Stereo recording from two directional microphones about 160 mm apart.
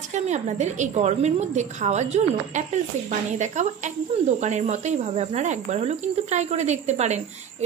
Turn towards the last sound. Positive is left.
turn(degrees=-45)  # may be behind; listen again after turning